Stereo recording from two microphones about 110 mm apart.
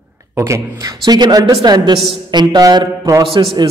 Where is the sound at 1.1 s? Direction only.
40° right (ahead or behind).